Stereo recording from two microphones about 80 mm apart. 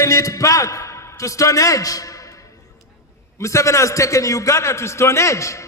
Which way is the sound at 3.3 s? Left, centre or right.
Left.